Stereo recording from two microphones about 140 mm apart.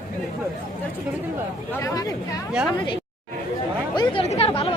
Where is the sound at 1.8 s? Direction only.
25° left (ahead or behind).